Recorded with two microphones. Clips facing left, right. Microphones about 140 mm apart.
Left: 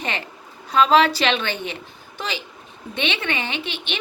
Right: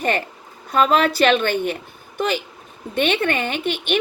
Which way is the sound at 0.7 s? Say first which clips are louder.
Left 1 dB; 50° right (ahead or behind).